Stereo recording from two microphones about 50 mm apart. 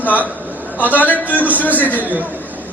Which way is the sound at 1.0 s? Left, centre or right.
Left.